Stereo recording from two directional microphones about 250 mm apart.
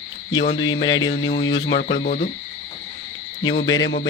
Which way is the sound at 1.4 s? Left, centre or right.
Left.